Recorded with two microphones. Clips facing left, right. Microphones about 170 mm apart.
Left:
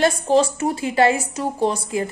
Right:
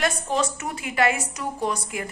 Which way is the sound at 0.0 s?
30° left (ahead or behind).